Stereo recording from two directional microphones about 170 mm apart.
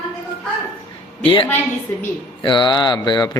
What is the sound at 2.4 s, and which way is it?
Mantra, 25° left (ahead or behind).